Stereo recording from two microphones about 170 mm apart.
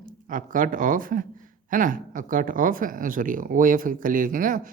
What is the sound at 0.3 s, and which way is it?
Speech, 50° right (ahead or behind).